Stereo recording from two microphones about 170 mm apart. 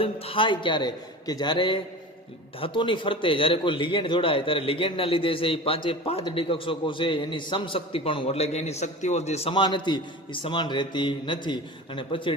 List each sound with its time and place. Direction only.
0.0 s a man's voice: 30° left (ahead or behind)